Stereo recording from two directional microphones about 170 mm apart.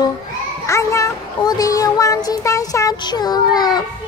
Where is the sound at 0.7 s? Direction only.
20° left (ahead or behind).